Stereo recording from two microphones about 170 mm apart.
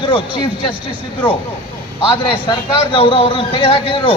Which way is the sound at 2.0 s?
30° left (ahead or behind).